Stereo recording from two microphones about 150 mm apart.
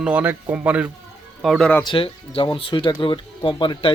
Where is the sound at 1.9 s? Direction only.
35° left (ahead or behind).